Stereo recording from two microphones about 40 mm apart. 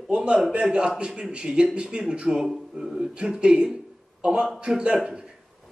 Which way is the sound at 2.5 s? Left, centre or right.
Centre.